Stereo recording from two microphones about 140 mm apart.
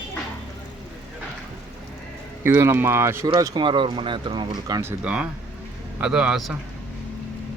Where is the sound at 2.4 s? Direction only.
20° right (ahead or behind).